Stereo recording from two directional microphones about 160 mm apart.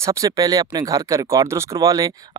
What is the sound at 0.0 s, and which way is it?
Speech, 20° right (ahead or behind).